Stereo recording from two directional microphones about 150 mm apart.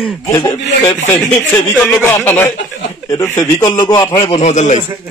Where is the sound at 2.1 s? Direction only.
15° left (ahead or behind).